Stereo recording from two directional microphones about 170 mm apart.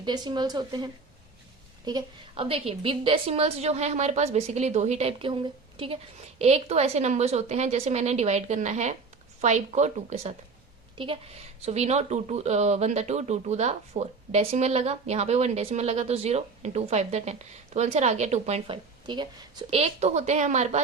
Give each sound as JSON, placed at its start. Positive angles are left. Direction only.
{"t": 0.0, "sound": "speech", "side_deg": -25}
{"t": 10.9, "sound": "a woman's voice", "side_deg": -30}
{"t": 19.0, "sound": "speech", "side_deg": -25}